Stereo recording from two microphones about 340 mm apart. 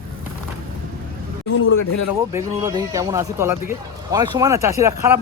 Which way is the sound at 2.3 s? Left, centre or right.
Centre.